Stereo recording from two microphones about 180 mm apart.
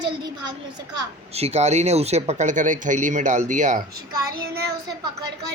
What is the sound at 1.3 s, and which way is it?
Speech, 35° right (ahead or behind).